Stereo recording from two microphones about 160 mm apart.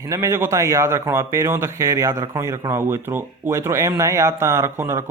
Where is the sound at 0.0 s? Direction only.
20° right (ahead or behind).